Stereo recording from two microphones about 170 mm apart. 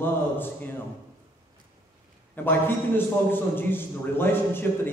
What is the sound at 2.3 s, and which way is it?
A man's voice, 10° left (ahead or behind).